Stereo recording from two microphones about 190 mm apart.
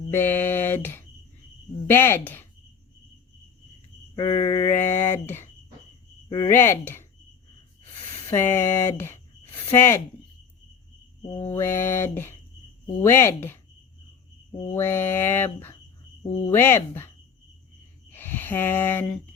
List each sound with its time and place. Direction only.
0.1 s mantra: 10° left (ahead or behind)
4.1 s a sound: 25° left (ahead or behind)
4.6 s mantra: 10° left (ahead or behind)
6.2 s speech: 20° left (ahead or behind)
8.3 s mantra: 15° left (ahead or behind)
11.3 s mantra: 10° left (ahead or behind)
14.7 s mantra: 15° left (ahead or behind)
18.1 s a sound: 10° left (ahead or behind)